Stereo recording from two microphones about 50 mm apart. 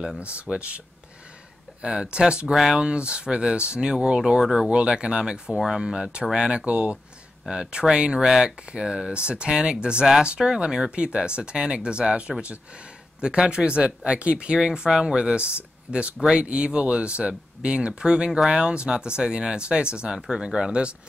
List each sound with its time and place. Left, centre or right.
0.2 s speech: right
2.5 s speech: centre
2.8 s speech: right